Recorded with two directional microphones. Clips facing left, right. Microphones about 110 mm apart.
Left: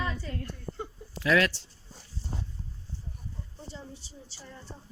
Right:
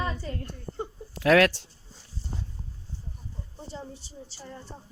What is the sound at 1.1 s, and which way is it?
Speech, 60° right (ahead or behind).